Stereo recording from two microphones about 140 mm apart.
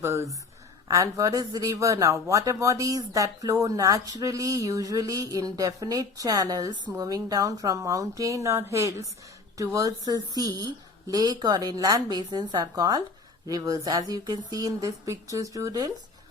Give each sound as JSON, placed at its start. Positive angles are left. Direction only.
{"t": 0.0, "sound": "speech", "side_deg": -20}